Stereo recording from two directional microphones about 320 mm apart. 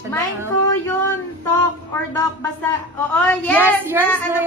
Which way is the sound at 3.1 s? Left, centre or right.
Centre.